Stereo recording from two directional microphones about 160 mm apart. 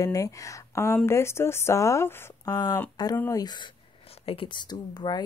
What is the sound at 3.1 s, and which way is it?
Speech, 10° left (ahead or behind).